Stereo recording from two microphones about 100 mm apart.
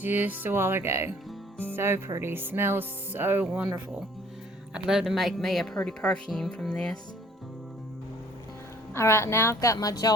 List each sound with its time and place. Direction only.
0.0 s speech: 20° right (ahead or behind); by 7.0 s 5° left (ahead or behind)
9.0 s a woman's voice: 25° left (ahead or behind)
9.6 s speech: 35° left (ahead or behind)